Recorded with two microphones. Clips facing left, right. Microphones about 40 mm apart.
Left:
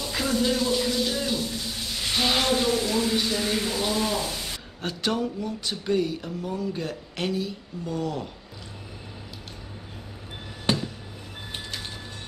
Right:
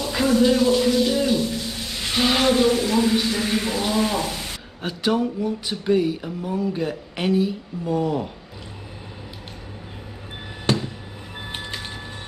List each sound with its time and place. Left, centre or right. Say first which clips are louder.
0.0 s a sound: right 7 dB; centre
2.1 s speech: right 5 dB; centre
4.8 s speech: right 5 dB; centre
11.4 s train: right 4 dB; right